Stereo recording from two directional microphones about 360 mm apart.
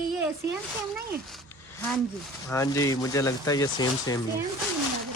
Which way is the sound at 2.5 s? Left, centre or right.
Centre.